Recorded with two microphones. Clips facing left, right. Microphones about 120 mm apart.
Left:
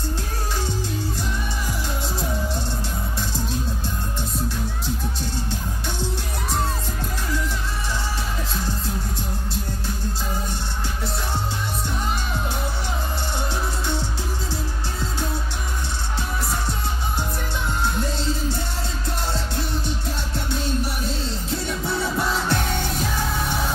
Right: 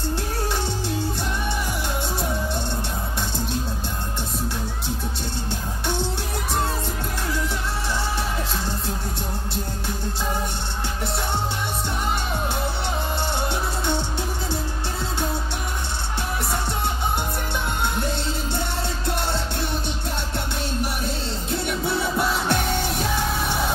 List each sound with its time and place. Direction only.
21.8 s music: 65° right (ahead or behind)